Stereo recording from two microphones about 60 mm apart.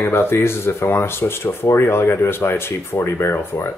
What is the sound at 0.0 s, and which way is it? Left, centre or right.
Speech, left.